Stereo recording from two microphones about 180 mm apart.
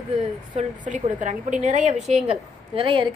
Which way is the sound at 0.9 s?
45° right (ahead or behind).